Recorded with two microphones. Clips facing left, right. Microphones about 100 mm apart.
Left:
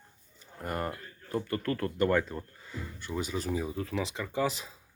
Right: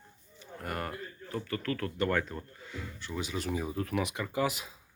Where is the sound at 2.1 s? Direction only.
10° left (ahead or behind).